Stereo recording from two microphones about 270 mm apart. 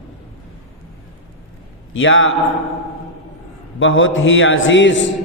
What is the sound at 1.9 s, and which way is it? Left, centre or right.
Speech, left.